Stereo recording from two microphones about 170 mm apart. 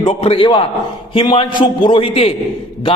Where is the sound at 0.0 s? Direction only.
30° left (ahead or behind).